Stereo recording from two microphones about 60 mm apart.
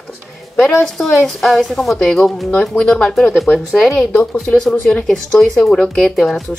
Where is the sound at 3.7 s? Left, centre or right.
Centre.